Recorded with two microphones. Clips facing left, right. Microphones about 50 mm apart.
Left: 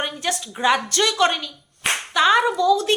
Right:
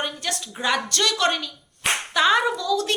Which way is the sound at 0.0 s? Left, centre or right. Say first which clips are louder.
Left 3 dB; centre.